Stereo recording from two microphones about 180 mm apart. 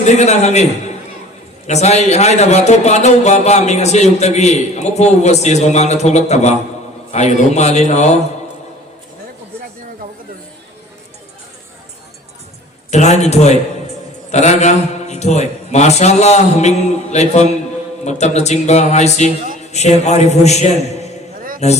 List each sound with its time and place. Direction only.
0.0 s a man's voice: 40° left (ahead or behind)
12.9 s a man's voice: 40° left (ahead or behind)